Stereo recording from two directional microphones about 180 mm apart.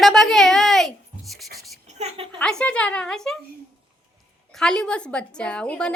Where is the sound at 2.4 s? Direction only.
5° left (ahead or behind).